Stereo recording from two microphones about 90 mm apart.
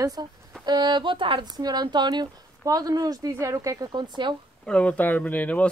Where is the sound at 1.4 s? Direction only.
50° right (ahead or behind).